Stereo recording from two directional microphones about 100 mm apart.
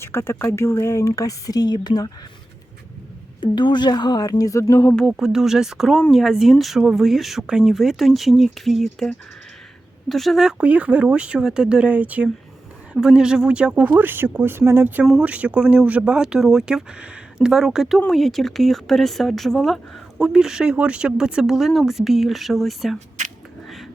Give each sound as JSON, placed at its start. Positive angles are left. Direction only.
{"t": 0.0, "sound": "speech", "side_deg": 25}
{"t": 3.4, "sound": "speech", "side_deg": 50}
{"t": 5.1, "sound": "speech", "side_deg": -5}
{"t": 10.6, "sound": "speech", "side_deg": -15}